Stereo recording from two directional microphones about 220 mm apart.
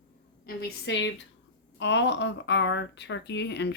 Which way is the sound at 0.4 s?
55° left (ahead or behind).